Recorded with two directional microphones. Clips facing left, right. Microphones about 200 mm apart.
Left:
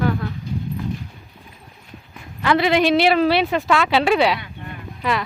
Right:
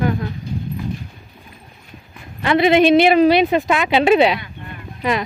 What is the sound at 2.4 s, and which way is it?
A woman's voice, 20° right (ahead or behind).